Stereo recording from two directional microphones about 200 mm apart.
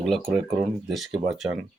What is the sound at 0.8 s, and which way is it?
Speech, centre (ahead or behind).